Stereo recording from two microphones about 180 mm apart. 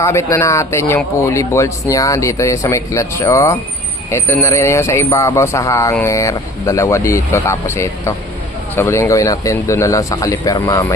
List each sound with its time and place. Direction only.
0.0 s speech: 15° left (ahead or behind)